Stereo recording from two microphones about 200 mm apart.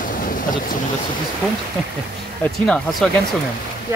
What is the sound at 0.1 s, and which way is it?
Boat, 40° left (ahead or behind).